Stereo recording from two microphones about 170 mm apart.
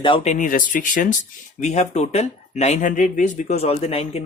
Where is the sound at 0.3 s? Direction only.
50° left (ahead or behind).